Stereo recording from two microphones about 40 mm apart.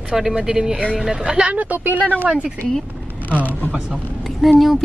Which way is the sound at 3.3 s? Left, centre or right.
Left.